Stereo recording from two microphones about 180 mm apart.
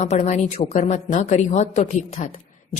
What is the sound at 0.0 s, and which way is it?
A woman's voice, 40° left (ahead or behind).